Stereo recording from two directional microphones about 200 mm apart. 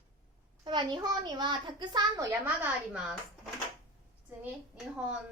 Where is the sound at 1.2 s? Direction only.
25° right (ahead or behind); by 3.2 s 5° right (ahead or behind).